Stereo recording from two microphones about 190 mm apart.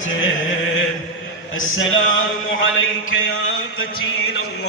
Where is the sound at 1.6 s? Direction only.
90° left.